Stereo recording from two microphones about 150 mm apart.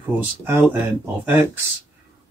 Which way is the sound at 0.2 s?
15° right (ahead or behind).